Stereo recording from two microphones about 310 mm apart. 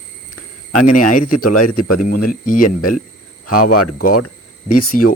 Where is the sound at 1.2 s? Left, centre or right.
Left.